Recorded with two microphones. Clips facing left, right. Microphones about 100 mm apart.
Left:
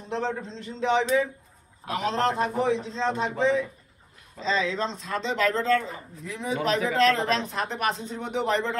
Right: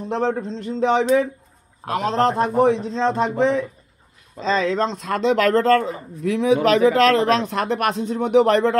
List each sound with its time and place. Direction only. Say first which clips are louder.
0.1 s a man's voice: right 7 dB; 55° right (ahead or behind)
6.2 s speech: right 11 dB; 85° right; by 8.7 s 65° right (ahead or behind)